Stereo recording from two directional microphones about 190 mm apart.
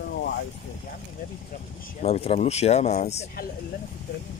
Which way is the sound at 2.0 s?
30° left (ahead or behind).